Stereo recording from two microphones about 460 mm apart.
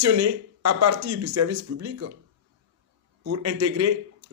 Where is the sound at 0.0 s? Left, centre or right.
Right.